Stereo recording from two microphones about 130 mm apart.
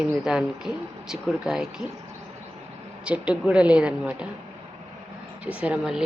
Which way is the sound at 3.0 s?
10° right (ahead or behind).